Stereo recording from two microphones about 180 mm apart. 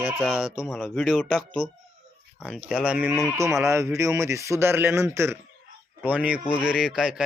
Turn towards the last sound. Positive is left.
turn(degrees=-5)  # may be behind; listen again after turning